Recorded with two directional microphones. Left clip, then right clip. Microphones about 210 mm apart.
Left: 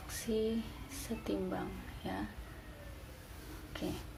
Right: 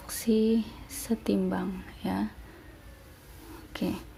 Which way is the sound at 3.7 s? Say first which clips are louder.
Right 8 dB; 50° right (ahead or behind).